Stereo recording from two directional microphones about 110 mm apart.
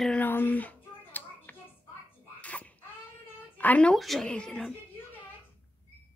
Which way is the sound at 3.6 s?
10° left (ahead or behind).